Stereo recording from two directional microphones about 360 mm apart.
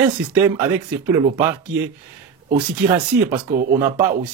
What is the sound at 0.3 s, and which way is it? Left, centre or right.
Speech, centre.